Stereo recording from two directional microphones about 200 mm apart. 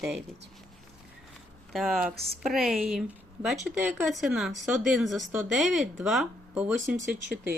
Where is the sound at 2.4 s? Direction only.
Centre (ahead or behind).